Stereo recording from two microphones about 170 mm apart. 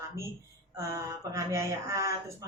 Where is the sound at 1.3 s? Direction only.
20° right (ahead or behind).